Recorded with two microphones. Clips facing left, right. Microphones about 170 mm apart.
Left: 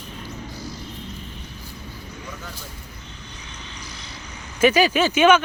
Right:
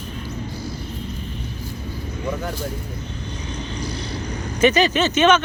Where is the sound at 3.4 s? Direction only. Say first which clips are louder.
Right 13 dB; 30° right (ahead or behind).